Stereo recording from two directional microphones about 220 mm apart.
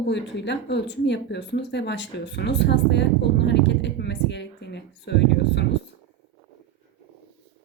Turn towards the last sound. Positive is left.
turn(degrees=50)  # may be behind; listen again after turning